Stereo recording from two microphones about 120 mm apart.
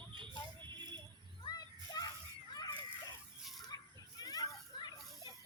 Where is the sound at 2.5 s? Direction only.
35° left (ahead or behind).